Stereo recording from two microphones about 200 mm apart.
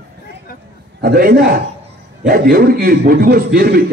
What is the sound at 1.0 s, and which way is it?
Speech, 45° right (ahead or behind).